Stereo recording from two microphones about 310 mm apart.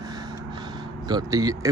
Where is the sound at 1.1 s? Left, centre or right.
Centre.